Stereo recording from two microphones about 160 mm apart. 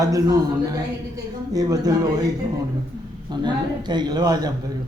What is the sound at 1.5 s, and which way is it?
Speech, 25° right (ahead or behind).